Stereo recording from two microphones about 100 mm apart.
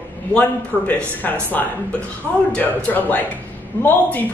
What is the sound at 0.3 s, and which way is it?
Speech, 10° left (ahead or behind).